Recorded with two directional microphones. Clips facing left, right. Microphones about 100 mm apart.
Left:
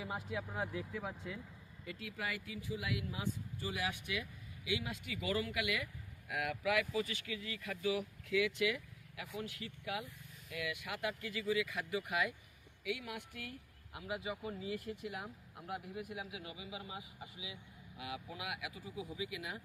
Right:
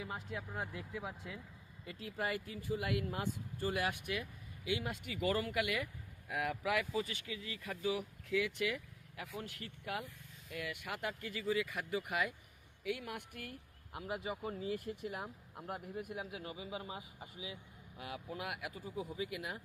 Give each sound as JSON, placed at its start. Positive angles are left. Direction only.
{"t": 0.0, "sound": "speech", "side_deg": 5}
{"t": 0.9, "sound": "speech", "side_deg": -10}
{"t": 1.8, "sound": "speech", "side_deg": -30}